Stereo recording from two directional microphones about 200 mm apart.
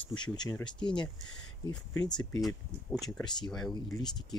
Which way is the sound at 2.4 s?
Centre (ahead or behind).